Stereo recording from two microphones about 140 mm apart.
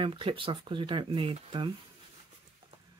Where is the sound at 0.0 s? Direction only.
35° right (ahead or behind).